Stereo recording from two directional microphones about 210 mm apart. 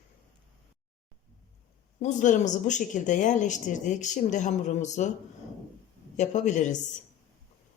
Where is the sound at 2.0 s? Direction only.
35° left (ahead or behind).